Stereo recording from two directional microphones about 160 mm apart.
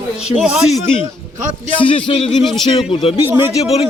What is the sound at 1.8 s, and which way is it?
Speech, 35° left (ahead or behind).